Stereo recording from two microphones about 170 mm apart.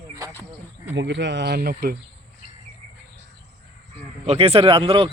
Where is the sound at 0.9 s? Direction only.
90° right; by 1.9 s 60° right (ahead or behind).